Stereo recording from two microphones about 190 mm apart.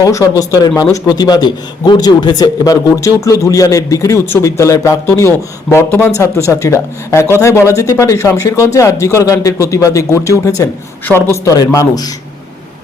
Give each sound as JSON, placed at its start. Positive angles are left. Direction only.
{"t": 0.0, "sound": "a man's voice", "side_deg": 20}